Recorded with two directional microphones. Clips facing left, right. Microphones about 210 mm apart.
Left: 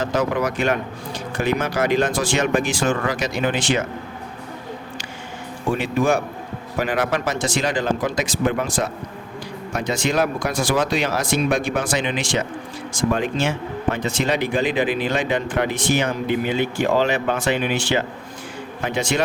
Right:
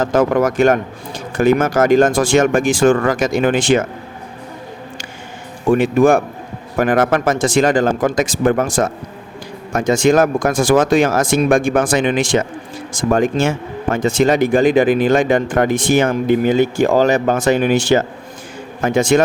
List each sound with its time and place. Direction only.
0.0 s speech: 50° right (ahead or behind)
5.7 s speech: 50° right (ahead or behind)